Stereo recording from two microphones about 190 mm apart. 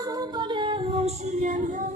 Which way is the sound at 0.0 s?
20° right (ahead or behind).